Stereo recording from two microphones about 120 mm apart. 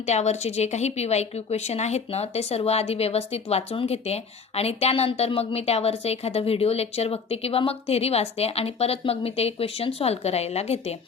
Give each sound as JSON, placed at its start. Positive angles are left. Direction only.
{"t": 0.0, "sound": "a woman's voice", "side_deg": 70}